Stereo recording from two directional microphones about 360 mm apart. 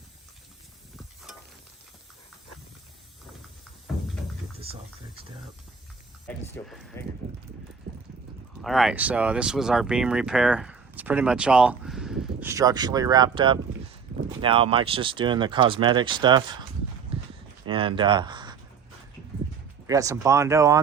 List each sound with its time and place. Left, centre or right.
0.9 s stir: centre
4.6 s speech: centre
6.2 s speech: centre
7.9 s a sound: right
8.6 s speech: centre
17.7 s speech: centre
19.9 s speech: centre